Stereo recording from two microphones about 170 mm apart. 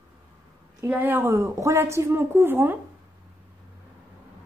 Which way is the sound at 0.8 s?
10° right (ahead or behind).